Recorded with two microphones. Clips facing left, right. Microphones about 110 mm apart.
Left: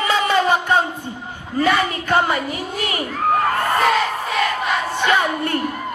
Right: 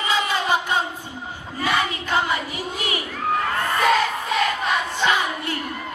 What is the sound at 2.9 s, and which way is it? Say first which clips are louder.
Crowd: left 5 dB; 45° left (ahead or behind).